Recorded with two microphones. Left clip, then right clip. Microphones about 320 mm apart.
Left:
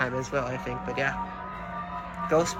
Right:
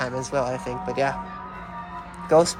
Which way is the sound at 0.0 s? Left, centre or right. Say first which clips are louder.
Right 3 dB; centre.